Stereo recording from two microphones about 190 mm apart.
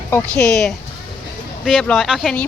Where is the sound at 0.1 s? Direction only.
5° left (ahead or behind).